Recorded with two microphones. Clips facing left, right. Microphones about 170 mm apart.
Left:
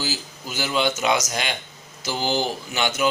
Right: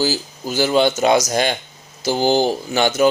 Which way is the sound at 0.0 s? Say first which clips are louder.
Right 9 dB; 35° right (ahead or behind).